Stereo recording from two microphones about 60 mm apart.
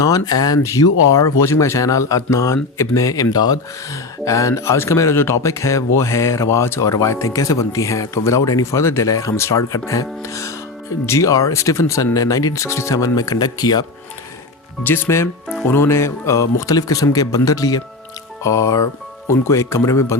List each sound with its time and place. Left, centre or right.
0.0 s speech: left
0.6 s speech: left
9.0 s speech: left
9.3 s speech: left
12.1 s speech: left
12.6 s speech: left
14.8 s speech: left
18.4 s speech: left